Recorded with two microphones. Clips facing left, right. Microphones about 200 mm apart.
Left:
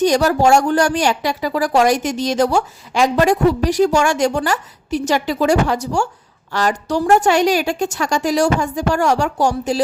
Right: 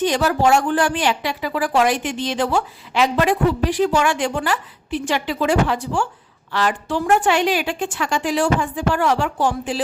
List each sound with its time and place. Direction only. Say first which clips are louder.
0.0 s speech: left 4 dB; 40° left (ahead or behind)